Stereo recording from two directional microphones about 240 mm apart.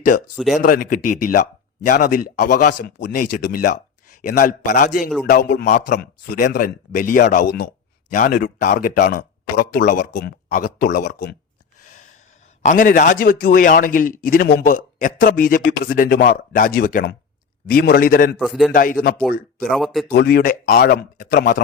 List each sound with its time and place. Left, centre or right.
0.3 s a man's voice: centre
0.6 s a man's voice: left
12.6 s a man's voice: left
18.3 s a man's voice: centre
18.7 s a man's voice: left
19.7 s a man's voice: centre
20.1 s a man's voice: left